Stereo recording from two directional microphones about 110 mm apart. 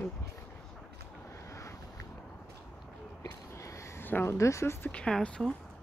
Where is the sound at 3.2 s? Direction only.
30° left (ahead or behind).